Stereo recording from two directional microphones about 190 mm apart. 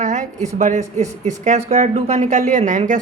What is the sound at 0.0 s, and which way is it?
A woman's voice, 40° right (ahead or behind).